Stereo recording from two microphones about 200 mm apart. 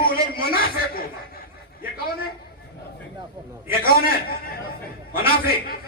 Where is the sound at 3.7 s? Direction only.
50° left (ahead or behind).